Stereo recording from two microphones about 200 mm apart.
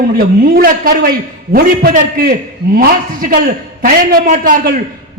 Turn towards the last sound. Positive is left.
turn(degrees=-45)  # may be behind; listen again after turning